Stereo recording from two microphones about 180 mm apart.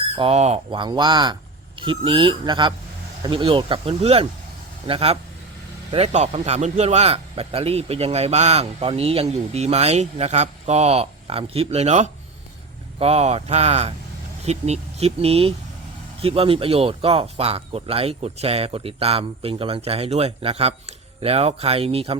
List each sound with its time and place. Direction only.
0.2 s a man's voice: 35° right (ahead or behind)